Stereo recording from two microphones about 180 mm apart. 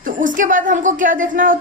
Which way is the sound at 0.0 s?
45° right (ahead or behind).